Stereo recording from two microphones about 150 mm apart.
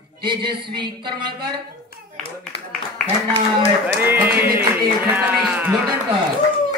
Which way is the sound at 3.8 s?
15° right (ahead or behind).